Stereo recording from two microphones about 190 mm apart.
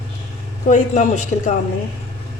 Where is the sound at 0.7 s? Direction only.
40° left (ahead or behind).